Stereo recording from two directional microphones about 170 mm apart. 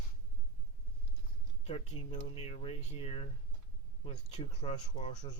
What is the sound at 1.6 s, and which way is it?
Speech, 40° left (ahead or behind).